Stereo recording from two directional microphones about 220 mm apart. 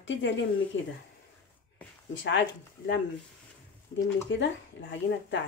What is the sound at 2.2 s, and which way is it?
Speech, 55° left (ahead or behind).